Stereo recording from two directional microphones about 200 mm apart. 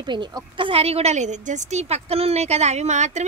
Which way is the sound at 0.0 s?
20° right (ahead or behind).